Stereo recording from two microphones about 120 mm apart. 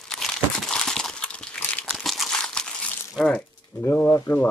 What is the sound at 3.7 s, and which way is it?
Pigeon, 30° left (ahead or behind).